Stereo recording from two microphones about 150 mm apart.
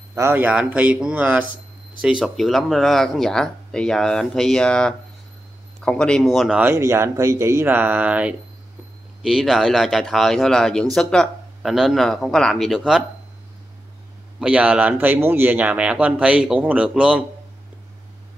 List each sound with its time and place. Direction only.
0.1 s speech: 15° right (ahead or behind)
6.6 s speech: 20° right (ahead or behind)
14.4 s speech: 10° right (ahead or behind)